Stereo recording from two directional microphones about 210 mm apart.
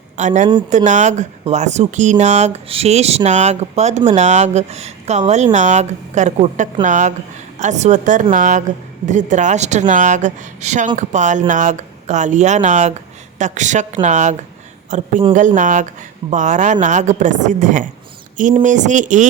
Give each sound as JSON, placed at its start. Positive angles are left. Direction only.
{"t": 0.2, "sound": "a woman's voice", "side_deg": -35}